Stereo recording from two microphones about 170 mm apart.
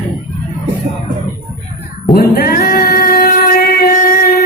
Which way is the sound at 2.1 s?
65° left (ahead or behind).